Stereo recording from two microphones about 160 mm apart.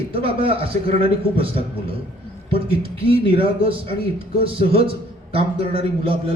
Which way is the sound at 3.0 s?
35° right (ahead or behind).